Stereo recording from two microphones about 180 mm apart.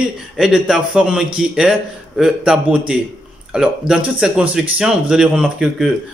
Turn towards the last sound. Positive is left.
turn(degrees=0)  # may be behind; listen again after turning